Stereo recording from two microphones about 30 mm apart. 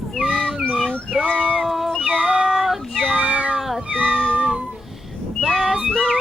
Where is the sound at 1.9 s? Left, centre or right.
Centre.